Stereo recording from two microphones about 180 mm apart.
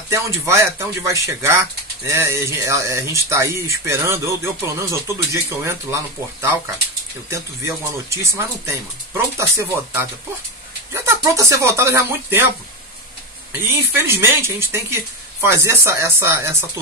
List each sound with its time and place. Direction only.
0.1 s speech: 15° right (ahead or behind)